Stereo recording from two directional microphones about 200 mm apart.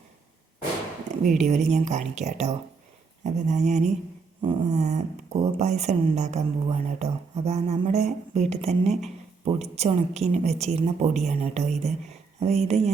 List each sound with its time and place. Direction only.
1.2 s speech: 35° right (ahead or behind)